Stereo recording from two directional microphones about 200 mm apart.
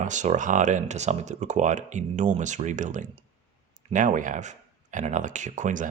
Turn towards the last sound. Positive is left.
turn(degrees=-40)  # may be behind; listen again after turning